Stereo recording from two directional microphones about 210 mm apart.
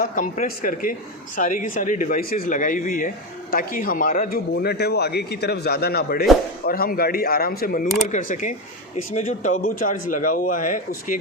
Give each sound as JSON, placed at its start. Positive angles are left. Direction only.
{"t": 0.0, "sound": "speech", "side_deg": 40}